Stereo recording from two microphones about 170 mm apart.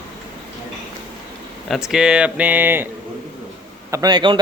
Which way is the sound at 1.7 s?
5° right (ahead or behind).